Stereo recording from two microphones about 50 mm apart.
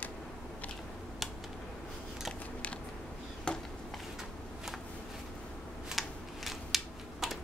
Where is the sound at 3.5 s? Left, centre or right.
Centre.